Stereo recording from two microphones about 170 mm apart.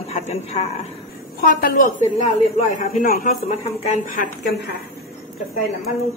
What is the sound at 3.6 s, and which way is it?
Speech, 40° left (ahead or behind).